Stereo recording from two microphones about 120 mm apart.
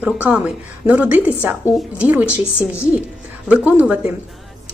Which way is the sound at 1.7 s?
Centre (ahead or behind).